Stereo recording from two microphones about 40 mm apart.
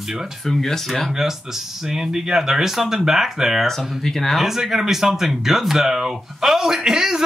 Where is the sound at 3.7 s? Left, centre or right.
Centre.